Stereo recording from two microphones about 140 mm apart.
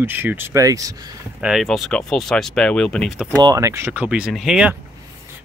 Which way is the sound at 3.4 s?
25° right (ahead or behind).